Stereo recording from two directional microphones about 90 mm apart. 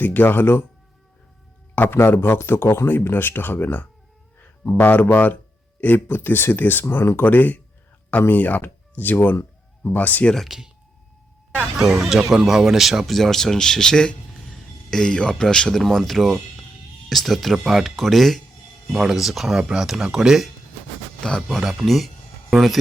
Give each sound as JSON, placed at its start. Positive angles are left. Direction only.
{"t": 0.0, "sound": "speech", "side_deg": 20}
{"t": 1.7, "sound": "speech", "side_deg": 25}
{"t": 10.3, "sound": "speech", "side_deg": -5}
{"t": 11.9, "sound": "speech", "side_deg": -10}